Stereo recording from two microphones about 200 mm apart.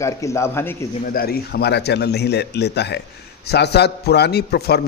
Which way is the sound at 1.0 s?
50° left (ahead or behind).